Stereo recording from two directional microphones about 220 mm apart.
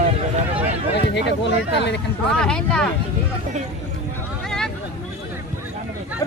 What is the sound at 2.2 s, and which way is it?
Speech, 5° left (ahead or behind).